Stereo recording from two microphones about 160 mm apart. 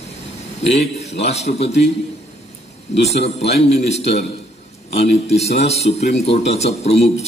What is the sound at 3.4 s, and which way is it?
Speech, 40° left (ahead or behind).